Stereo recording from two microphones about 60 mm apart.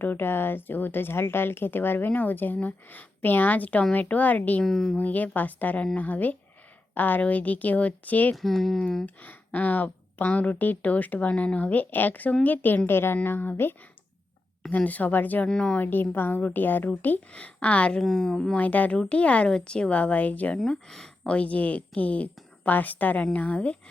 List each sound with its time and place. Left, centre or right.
0.0 s a woman's voice: left
4.6 s a woman's voice: centre
4.9 s a woman's voice: left
8.4 s a woman's voice: centre
9.0 s a woman's voice: left
14.8 s a woman's voice: left
15.4 s a woman's voice: centre
15.8 s a woman's voice: left
18.0 s a woman's voice: centre
18.5 s a woman's voice: left
20.7 s speech: centre
21.3 s a woman's voice: left